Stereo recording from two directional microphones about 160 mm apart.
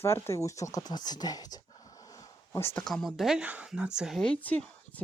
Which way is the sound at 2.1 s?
20° left (ahead or behind).